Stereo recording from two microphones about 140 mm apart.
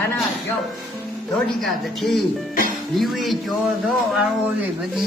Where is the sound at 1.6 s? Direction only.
Centre (ahead or behind).